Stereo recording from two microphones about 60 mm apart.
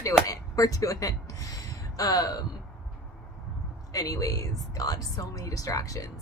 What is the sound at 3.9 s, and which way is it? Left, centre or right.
A woman's voice, left.